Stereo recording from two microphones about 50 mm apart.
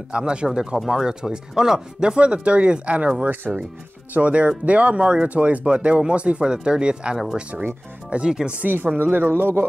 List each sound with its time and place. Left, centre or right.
0.1 s speech: centre
8.5 s speech: right